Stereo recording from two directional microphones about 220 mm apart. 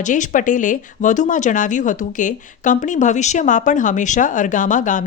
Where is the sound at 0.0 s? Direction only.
35° left (ahead or behind).